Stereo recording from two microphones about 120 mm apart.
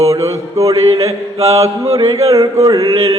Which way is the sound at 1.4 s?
60° right (ahead or behind).